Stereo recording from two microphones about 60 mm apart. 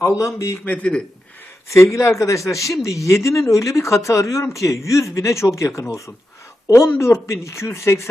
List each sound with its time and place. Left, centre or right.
0.0 s a man's voice: left
0.6 s speech: left
1.7 s speech: left